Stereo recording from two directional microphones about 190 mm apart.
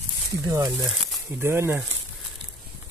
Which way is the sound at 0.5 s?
15° right (ahead or behind).